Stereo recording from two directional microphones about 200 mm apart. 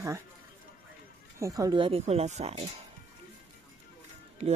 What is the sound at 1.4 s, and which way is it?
Speech, 20° right (ahead or behind).